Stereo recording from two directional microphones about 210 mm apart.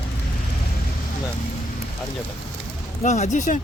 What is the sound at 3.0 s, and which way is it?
Speech, 35° left (ahead or behind).